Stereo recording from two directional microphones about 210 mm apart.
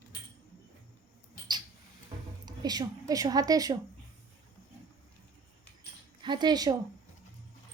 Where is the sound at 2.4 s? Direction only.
20° right (ahead or behind).